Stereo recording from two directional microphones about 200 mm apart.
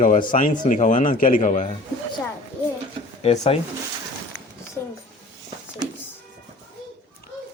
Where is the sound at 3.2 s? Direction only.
30° left (ahead or behind).